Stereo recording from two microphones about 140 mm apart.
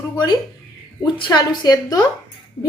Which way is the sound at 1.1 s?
35° left (ahead or behind).